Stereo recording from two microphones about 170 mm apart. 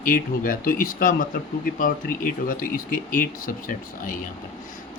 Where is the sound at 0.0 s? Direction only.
55° left (ahead or behind).